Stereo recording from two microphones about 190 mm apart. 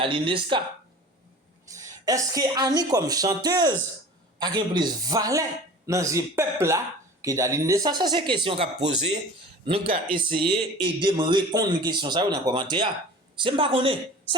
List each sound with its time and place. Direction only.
0.0 s a man's voice: 25° right (ahead or behind)
1.7 s a man's voice: 15° right (ahead or behind)